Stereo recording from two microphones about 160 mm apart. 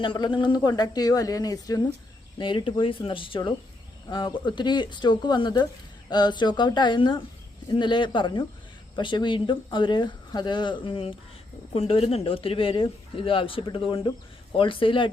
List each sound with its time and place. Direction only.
0.0 s a man's voice: 30° left (ahead or behind)